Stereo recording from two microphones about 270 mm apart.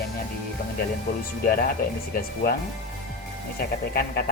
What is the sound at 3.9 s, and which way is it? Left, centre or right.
Speech, left.